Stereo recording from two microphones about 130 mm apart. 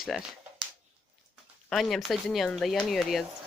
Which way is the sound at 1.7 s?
Centre (ahead or behind).